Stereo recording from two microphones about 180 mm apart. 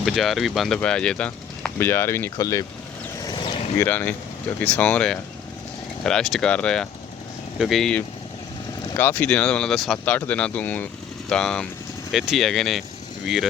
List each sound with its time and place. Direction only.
0.0 s speech: centre (ahead or behind); by 2.6 s 20° left (ahead or behind)
3.3 s a sound: 25° left (ahead or behind)
3.8 s speech: 10° left (ahead or behind)